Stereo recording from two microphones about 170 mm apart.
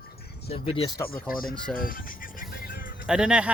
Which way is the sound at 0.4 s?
35° left (ahead or behind).